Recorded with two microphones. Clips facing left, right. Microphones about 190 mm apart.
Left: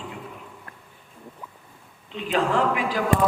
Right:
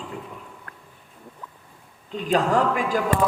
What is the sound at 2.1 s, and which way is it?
Speech, 40° right (ahead or behind).